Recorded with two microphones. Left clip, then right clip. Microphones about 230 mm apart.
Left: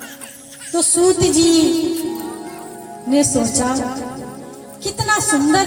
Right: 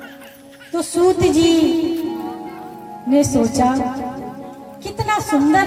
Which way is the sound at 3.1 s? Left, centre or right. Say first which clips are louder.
Right 1 dB; right.